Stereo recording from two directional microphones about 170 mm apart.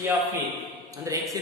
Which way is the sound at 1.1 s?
20° right (ahead or behind).